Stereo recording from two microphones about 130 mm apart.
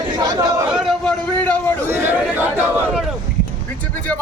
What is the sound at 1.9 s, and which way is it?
Speech, 15° right (ahead or behind).